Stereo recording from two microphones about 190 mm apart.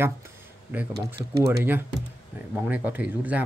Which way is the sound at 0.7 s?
10° right (ahead or behind).